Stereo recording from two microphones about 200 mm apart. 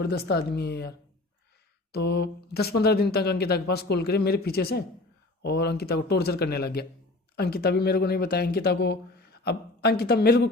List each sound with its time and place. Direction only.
0.0 s speech: 55° left (ahead or behind)